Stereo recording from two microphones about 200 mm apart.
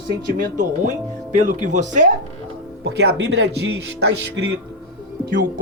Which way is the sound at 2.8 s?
55° right (ahead or behind).